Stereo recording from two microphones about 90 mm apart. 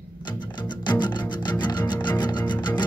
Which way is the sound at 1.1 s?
55° left (ahead or behind).